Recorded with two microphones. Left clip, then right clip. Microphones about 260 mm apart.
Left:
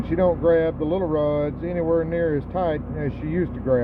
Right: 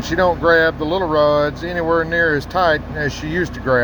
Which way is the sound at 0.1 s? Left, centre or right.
Right.